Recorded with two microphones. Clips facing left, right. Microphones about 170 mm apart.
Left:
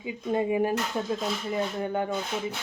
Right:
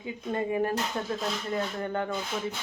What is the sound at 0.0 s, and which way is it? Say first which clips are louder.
A woman's voice: left 4 dB; 15° left (ahead or behind).